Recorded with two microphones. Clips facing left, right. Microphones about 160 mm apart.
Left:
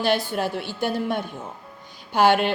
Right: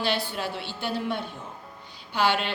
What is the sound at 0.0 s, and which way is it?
A woman's voice, 45° left (ahead or behind).